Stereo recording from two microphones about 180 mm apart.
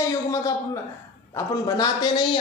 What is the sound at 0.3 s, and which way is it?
Speech, 20° left (ahead or behind).